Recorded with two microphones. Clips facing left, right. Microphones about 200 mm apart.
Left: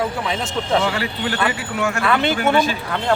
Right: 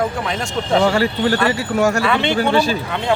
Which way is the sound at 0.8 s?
40° right (ahead or behind).